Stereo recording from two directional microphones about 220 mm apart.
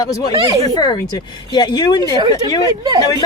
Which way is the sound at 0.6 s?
15° left (ahead or behind).